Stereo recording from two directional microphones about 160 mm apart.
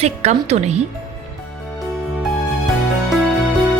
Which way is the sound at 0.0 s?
40° right (ahead or behind).